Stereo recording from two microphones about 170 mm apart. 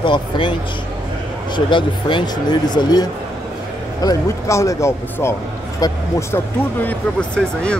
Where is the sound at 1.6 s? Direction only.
30° left (ahead or behind).